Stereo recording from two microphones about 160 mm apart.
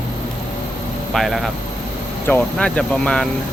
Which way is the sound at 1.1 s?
Centre (ahead or behind).